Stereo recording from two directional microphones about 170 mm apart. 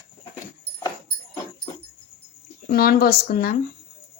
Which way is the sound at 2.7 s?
60° left (ahead or behind).